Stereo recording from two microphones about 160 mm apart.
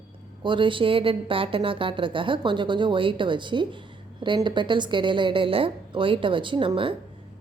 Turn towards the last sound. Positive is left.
turn(degrees=-35)  # may be behind; listen again after turning